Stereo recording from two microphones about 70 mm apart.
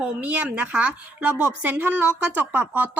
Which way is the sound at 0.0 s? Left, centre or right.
Right.